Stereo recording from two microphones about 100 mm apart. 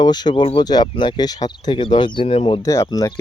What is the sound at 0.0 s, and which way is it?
Speech, 45° left (ahead or behind).